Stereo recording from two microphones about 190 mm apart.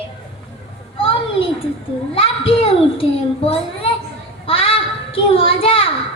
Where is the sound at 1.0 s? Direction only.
25° left (ahead or behind).